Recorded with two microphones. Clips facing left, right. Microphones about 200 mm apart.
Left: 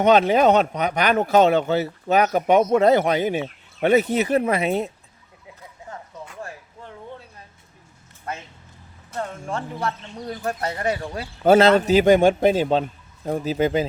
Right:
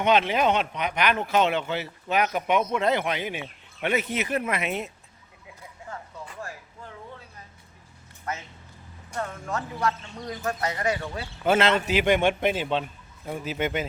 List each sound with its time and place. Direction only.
0.0 s speech: 40° left (ahead or behind)
9.1 s speech: 30° left (ahead or behind)